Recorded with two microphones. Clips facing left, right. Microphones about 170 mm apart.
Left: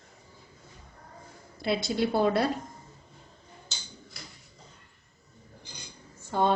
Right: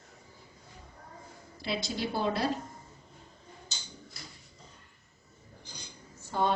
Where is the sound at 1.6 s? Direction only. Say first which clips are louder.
Left 6 dB; 55° left (ahead or behind).